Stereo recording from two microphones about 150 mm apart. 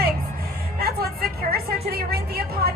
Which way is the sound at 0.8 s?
90° right.